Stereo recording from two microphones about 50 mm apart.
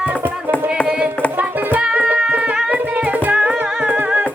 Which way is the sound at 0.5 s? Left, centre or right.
Left.